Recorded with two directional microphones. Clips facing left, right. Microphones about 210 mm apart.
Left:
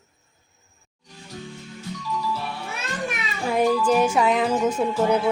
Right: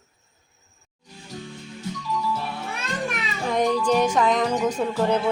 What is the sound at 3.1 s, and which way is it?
Children playing, 5° left (ahead or behind).